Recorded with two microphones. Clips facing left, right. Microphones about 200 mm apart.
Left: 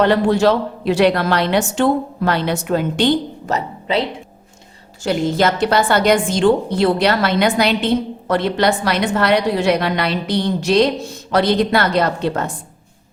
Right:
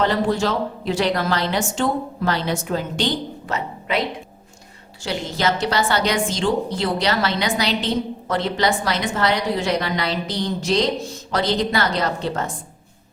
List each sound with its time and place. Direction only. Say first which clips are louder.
0.0 s a woman's voice: left 6 dB; 65° left (ahead or behind)
3.4 s a woman's voice: left 5 dB; 35° left (ahead or behind)
5.0 s a woman's voice: left 6 dB; 55° left (ahead or behind)